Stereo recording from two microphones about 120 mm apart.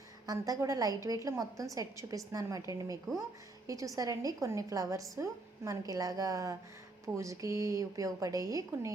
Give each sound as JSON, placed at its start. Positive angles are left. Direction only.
{"t": 0.3, "sound": "a woman's voice", "side_deg": -30}